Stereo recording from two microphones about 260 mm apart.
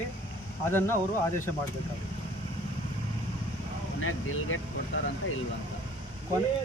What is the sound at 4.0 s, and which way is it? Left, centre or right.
Speech, left.